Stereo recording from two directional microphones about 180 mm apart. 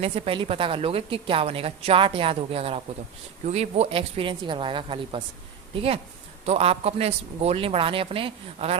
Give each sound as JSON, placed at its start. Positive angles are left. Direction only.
{"t": 0.0, "sound": "a woman's voice", "side_deg": -30}